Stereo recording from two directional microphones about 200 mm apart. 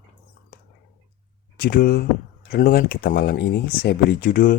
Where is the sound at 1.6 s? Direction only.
50° left (ahead or behind).